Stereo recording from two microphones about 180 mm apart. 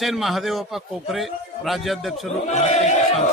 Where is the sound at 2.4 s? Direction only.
40° left (ahead or behind).